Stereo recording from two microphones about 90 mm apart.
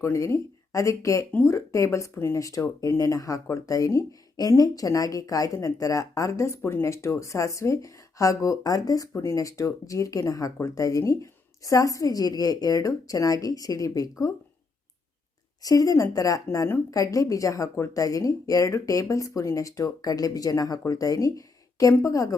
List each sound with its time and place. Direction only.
0.0 s speech: 30° left (ahead or behind)
15.6 s speech: 40° left (ahead or behind)